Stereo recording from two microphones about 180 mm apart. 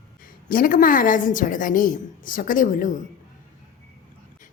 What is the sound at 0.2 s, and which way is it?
A woman's voice, 50° left (ahead or behind).